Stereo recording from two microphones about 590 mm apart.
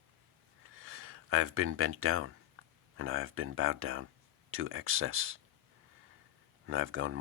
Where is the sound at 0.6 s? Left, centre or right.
Right.